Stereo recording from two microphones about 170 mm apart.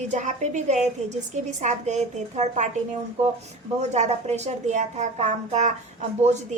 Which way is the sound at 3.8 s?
40° right (ahead or behind).